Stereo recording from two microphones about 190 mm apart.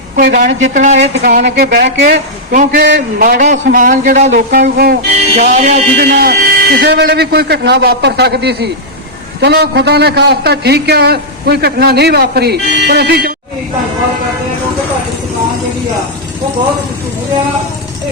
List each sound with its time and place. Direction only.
0.2 s a man's voice: 60° right (ahead or behind)
0.8 s speech: 40° right (ahead or behind)
1.3 s a man's voice: 55° right (ahead or behind)
2.8 s a man's voice: 65° right (ahead or behind)
3.2 s a man's voice: 45° right (ahead or behind)
4.3 s a man's voice: 60° right (ahead or behind)
5.3 s speech: 40° right (ahead or behind)
6.1 s a man's voice: 50° right (ahead or behind)